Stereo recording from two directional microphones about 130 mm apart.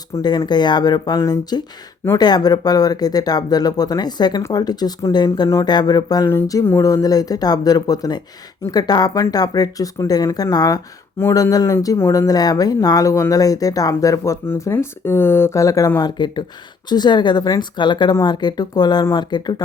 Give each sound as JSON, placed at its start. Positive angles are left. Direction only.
{"t": 0.1, "sound": "speech", "side_deg": 30}